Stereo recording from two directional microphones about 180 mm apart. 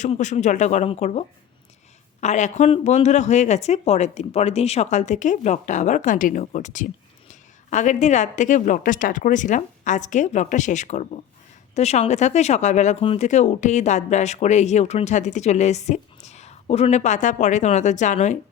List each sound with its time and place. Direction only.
0.0 s speech: 40° left (ahead or behind)
2.2 s speech: 40° left (ahead or behind)